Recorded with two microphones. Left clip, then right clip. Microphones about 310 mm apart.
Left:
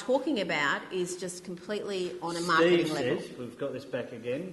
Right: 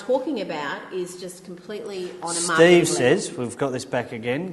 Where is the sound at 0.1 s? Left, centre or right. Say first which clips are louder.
Right 4 dB; left.